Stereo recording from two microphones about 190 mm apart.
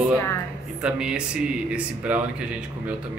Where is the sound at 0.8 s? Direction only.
5° right (ahead or behind).